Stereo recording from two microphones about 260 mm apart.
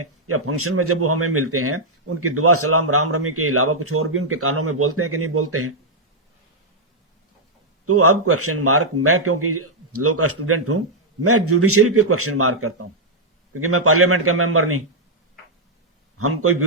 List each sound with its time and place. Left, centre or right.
0.0 s speech: right
7.9 s speech: right
16.1 s speech: right